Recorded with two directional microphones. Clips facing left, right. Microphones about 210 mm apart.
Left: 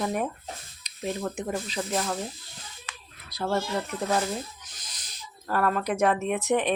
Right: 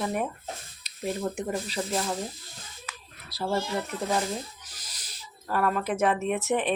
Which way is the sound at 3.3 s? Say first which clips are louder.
Left 1 dB; 5° right (ahead or behind).